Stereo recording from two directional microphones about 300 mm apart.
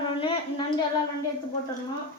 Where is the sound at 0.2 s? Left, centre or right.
Centre.